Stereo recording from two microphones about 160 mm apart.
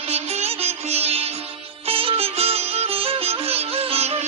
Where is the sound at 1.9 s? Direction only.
35° right (ahead or behind).